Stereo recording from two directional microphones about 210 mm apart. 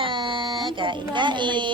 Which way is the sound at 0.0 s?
25° right (ahead or behind).